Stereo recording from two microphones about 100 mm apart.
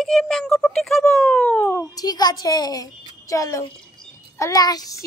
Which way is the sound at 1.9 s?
40° left (ahead or behind).